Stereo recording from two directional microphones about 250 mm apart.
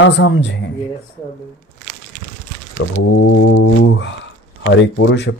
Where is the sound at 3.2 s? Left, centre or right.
Left.